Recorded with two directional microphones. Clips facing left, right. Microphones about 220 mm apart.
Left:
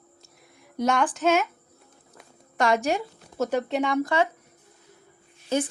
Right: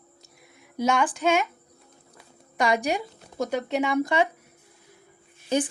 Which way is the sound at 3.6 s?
Centre (ahead or behind).